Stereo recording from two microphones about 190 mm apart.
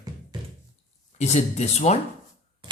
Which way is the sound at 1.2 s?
35° left (ahead or behind).